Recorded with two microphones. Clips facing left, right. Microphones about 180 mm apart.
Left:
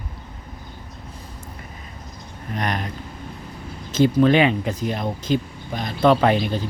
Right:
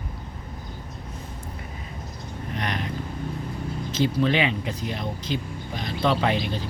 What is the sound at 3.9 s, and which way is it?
Speech, 50° left (ahead or behind).